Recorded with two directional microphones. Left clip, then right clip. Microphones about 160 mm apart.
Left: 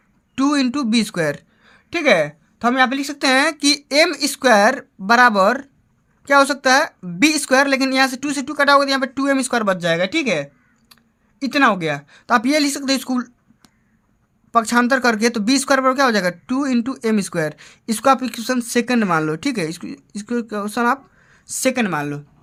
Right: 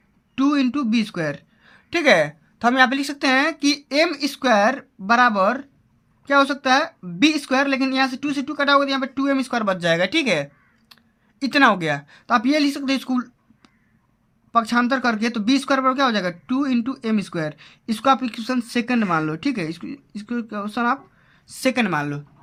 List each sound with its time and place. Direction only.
0.3 s speech: 40° left (ahead or behind)
1.6 s speech: 15° left (ahead or behind)
3.2 s speech: 35° left (ahead or behind)
9.7 s speech: 15° left (ahead or behind)
12.2 s speech: 35° left (ahead or behind)
14.5 s speech: 35° left (ahead or behind); by 22.2 s 15° left (ahead or behind)